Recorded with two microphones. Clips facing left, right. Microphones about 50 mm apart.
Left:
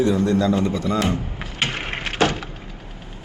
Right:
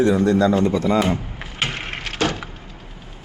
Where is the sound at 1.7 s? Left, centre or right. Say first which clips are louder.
Left 1 dB; centre.